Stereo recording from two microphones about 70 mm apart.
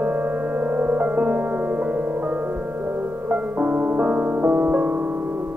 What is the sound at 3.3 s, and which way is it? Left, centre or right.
Music, centre.